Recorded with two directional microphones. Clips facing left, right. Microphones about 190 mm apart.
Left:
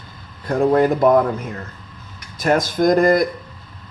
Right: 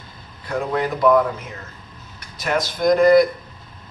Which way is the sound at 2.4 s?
45° left (ahead or behind).